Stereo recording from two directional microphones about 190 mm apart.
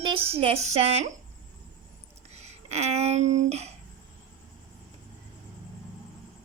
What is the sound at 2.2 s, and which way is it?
Speech, 35° right (ahead or behind).